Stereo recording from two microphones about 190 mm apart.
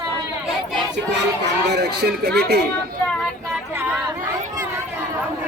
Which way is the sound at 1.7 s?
60° right (ahead or behind).